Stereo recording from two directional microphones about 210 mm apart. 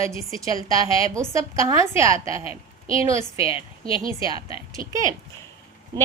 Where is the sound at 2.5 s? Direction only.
25° left (ahead or behind).